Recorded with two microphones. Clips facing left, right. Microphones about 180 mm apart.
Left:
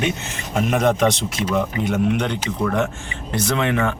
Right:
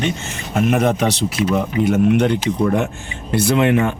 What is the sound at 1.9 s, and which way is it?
Speech, 10° right (ahead or behind).